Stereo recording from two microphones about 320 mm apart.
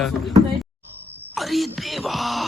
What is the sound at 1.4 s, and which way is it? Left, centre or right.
Speech, centre.